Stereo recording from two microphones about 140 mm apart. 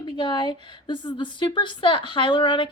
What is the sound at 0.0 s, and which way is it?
Speech, 35° left (ahead or behind).